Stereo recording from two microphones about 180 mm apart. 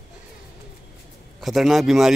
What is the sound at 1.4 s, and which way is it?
Speech, centre (ahead or behind).